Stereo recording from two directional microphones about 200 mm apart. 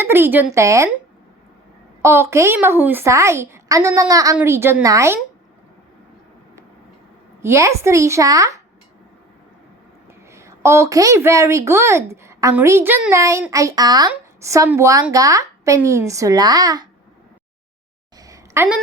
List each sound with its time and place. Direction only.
0.0 s a woman's voice: 10° right (ahead or behind)
2.0 s a woman's voice: 15° right (ahead or behind)
7.4 s a woman's voice: 15° right (ahead or behind)
10.3 s a woman's voice: 15° right (ahead or behind)
18.2 s a sound: 15° right (ahead or behind)